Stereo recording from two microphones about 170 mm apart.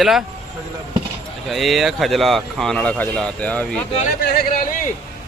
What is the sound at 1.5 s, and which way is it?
A man's voice, centre (ahead or behind).